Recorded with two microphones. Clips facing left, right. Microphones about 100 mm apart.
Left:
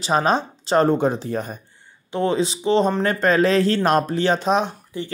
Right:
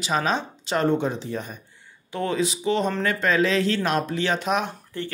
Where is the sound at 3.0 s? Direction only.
40° left (ahead or behind).